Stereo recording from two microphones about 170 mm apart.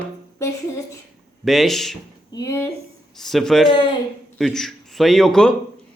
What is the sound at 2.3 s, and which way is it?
Speech, 20° left (ahead or behind).